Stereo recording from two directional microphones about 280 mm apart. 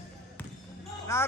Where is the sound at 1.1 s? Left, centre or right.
Centre.